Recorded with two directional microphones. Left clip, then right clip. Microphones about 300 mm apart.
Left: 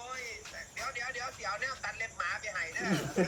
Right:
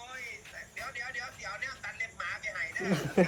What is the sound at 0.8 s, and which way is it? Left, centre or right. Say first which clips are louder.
Speech: left 1 dB; centre.